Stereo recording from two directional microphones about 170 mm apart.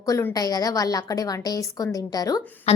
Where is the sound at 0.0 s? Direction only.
20° left (ahead or behind).